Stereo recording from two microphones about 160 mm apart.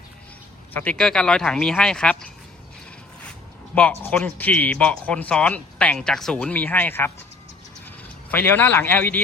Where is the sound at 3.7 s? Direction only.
5° left (ahead or behind).